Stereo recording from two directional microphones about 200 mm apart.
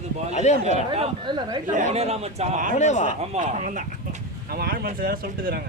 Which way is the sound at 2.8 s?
35° left (ahead or behind).